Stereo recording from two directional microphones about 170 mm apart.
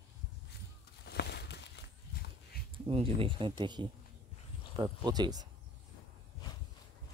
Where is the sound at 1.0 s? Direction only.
75° left (ahead or behind).